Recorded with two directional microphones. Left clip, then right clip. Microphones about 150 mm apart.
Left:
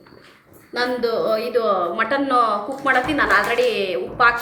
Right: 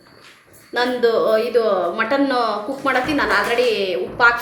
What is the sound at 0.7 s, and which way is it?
Speech, 25° right (ahead or behind).